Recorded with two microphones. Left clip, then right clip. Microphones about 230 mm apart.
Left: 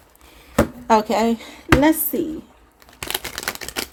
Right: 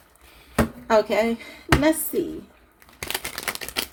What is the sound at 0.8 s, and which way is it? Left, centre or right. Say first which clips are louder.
Speech: left 2 dB; left.